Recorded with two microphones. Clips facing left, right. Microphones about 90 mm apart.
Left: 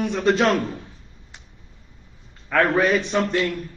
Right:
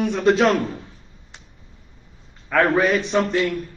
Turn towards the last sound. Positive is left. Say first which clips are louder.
# right 2 dB
turn(degrees=0)  # may be behind; listen again after turning